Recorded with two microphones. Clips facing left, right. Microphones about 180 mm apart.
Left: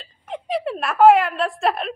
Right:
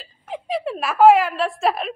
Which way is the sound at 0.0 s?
Centre (ahead or behind).